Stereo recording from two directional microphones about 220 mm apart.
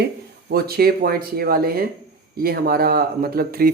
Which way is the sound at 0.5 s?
45° right (ahead or behind).